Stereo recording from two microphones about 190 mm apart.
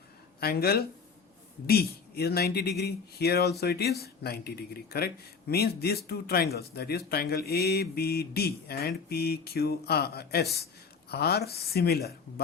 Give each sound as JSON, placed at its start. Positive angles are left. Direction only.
{"t": 0.3, "sound": "speech", "side_deg": 55}